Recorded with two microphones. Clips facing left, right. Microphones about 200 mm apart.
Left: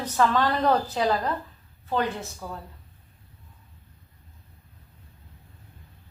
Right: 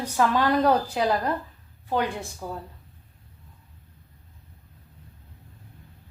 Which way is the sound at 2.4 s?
15° right (ahead or behind).